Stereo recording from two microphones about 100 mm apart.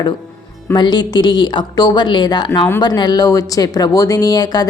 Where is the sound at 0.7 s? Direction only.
45° left (ahead or behind).